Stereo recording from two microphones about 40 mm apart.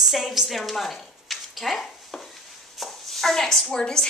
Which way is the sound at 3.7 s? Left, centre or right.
Centre.